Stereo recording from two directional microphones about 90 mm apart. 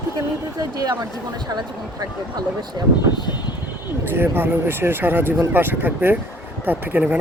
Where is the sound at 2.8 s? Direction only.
45° right (ahead or behind).